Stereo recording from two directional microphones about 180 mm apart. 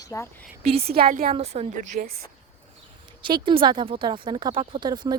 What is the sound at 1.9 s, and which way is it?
Speech, 55° right (ahead or behind).